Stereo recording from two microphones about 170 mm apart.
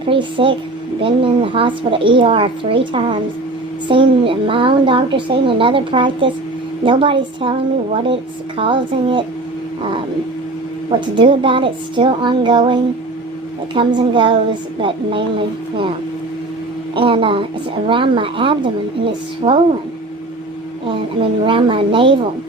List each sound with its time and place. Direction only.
0.0 s a woman's voice: 30° right (ahead or behind)
10.8 s a woman's voice: 30° right (ahead or behind)
16.9 s a woman's voice: 30° right (ahead or behind)
20.8 s a woman's voice: 30° right (ahead or behind)